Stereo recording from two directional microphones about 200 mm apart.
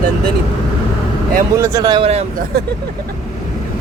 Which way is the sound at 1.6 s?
15° right (ahead or behind).